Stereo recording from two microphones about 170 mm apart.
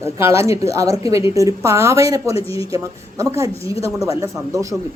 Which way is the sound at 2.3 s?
35° left (ahead or behind).